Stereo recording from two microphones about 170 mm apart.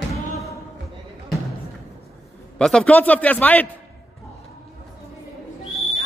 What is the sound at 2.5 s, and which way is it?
A man's voice, 5° left (ahead or behind).